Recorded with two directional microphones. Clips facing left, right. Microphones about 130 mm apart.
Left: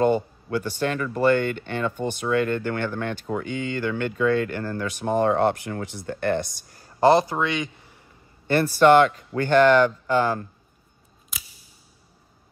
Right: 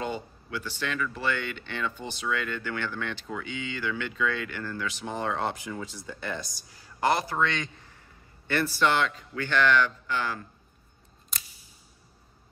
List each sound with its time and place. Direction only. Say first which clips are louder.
0.0 s speech: left 12 dB; 50° left (ahead or behind)
7.0 s a man's voice: left 8 dB; 25° left (ahead or behind); by 8.0 s 10° left (ahead or behind)
8.5 s speech: left 9 dB; 45° left (ahead or behind)
11.3 s scissors: even; 5° left (ahead or behind)